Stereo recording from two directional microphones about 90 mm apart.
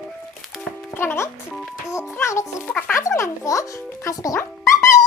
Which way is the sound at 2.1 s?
30° left (ahead or behind).